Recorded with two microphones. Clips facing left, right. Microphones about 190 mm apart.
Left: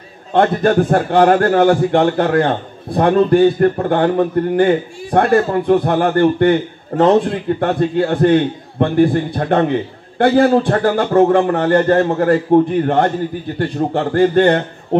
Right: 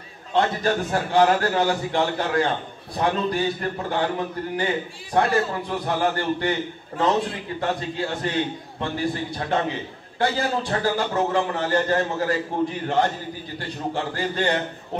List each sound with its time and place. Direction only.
0.3 s a man's voice: 55° left (ahead or behind)